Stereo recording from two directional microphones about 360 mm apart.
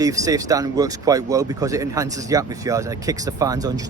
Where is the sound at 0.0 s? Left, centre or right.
Centre.